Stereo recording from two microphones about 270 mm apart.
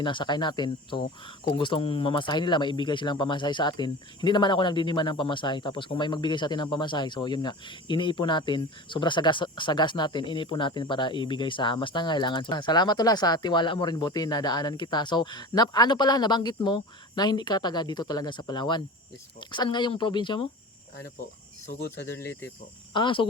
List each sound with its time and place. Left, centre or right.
0.0 s speech: centre
21.7 s speech: left
22.2 s speech: centre